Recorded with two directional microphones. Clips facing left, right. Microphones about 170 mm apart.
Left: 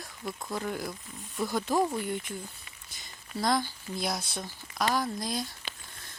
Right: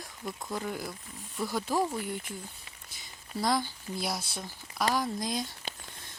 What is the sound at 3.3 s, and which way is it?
Speech, 10° right (ahead or behind).